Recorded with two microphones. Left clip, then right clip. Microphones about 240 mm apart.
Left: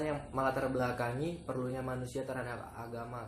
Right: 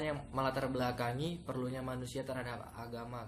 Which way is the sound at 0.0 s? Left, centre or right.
Right.